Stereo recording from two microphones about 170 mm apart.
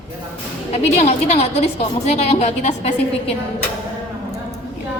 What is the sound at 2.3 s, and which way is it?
Speech, 40° left (ahead or behind).